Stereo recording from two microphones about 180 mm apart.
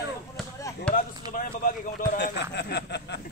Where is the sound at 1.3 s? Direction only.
50° left (ahead or behind).